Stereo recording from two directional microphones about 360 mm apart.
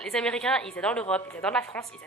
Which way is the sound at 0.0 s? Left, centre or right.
Centre.